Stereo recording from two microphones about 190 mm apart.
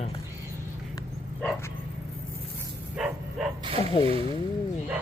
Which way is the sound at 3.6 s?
30° right (ahead or behind).